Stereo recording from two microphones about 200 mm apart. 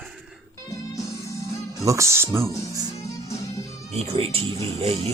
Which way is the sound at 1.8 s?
15° right (ahead or behind).